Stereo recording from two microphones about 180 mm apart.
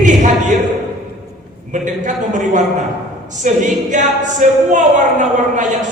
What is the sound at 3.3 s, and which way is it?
Speech, 45° right (ahead or behind).